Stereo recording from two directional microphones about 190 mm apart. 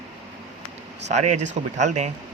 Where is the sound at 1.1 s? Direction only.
35° right (ahead or behind).